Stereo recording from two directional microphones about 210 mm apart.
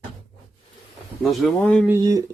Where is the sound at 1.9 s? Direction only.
20° right (ahead or behind).